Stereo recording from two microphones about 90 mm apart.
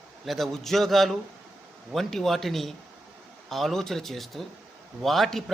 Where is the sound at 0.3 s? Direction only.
Centre (ahead or behind).